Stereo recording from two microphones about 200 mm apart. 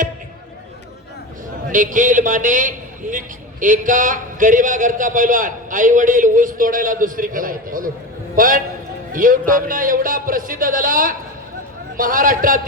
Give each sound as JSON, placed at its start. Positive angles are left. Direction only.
{"t": 1.7, "sound": "a man's voice", "side_deg": -40}